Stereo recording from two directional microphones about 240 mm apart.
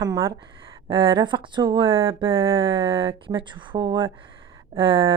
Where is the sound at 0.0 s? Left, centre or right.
Centre.